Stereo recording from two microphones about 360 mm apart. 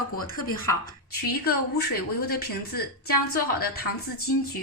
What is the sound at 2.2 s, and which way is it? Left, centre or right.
Speech, left.